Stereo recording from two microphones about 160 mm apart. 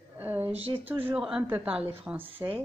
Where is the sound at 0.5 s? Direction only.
35° right (ahead or behind).